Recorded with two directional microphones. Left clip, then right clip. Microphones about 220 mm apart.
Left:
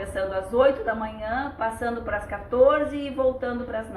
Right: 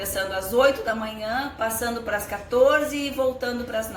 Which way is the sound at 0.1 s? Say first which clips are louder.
Right 1 dB; 30° right (ahead or behind).